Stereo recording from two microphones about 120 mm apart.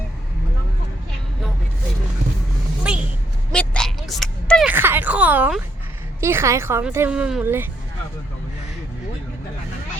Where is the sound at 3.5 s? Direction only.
5° left (ahead or behind).